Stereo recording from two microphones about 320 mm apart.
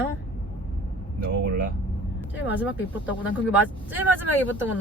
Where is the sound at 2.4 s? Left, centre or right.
Centre.